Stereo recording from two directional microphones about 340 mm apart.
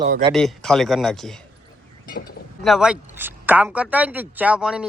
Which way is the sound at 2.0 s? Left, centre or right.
Left.